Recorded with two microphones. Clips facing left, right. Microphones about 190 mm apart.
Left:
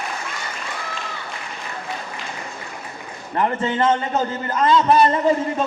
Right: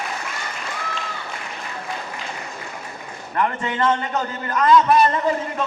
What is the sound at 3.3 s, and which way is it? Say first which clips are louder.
A man's voice: left 2 dB; 25° left (ahead or behind).